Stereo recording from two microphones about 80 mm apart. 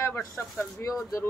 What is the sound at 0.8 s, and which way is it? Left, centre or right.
Speech, left.